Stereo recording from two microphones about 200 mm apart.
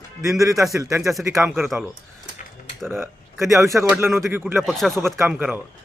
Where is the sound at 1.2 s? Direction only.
15° right (ahead or behind).